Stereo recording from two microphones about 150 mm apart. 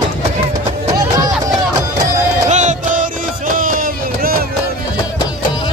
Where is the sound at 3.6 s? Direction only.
70° right (ahead or behind).